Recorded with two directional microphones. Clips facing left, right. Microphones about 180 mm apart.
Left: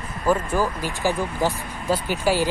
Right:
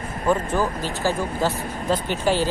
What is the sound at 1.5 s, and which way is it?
Speech, 40° right (ahead or behind).